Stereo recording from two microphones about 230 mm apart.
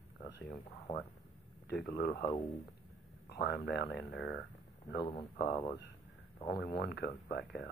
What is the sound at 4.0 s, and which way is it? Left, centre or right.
Speech, centre.